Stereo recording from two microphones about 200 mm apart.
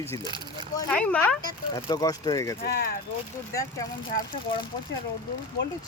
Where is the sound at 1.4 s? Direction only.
20° left (ahead or behind).